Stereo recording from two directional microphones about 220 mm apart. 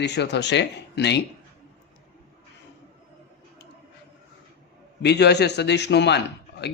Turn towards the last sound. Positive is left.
turn(degrees=50)  # may be behind; listen again after turning